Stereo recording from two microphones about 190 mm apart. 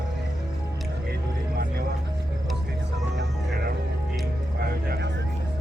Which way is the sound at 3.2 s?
55° right (ahead or behind).